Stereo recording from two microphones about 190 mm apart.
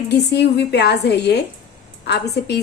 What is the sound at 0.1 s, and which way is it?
A woman's voice, 60° left (ahead or behind).